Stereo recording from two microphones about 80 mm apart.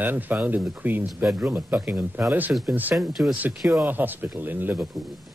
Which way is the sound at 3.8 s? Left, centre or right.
Right.